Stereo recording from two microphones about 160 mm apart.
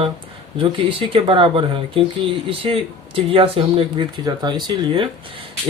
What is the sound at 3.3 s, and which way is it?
Speech, 35° right (ahead or behind).